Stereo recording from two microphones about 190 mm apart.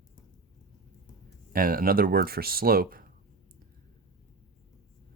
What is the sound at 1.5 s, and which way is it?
Speech, 50° right (ahead or behind).